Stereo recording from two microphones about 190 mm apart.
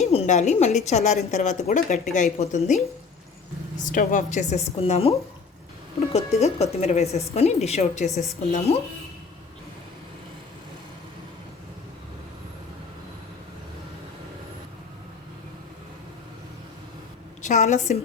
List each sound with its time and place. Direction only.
0.0 s a woman's voice: 35° left (ahead or behind)
3.8 s a woman's voice: 45° left (ahead or behind)
6.1 s a woman's voice: 35° left (ahead or behind)
17.4 s a woman's voice: 40° left (ahead or behind)